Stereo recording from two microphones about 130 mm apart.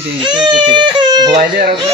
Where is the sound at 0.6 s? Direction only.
35° right (ahead or behind).